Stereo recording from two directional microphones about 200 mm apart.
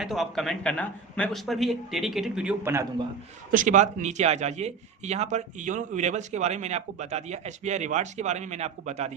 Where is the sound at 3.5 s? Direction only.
40° right (ahead or behind).